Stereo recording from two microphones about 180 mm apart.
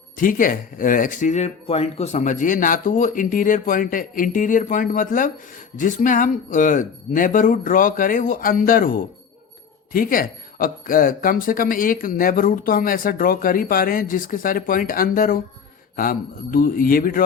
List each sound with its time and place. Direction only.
0.2 s speech: 50° left (ahead or behind)